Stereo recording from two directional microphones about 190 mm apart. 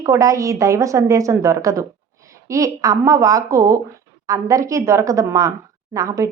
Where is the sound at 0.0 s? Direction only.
15° right (ahead or behind).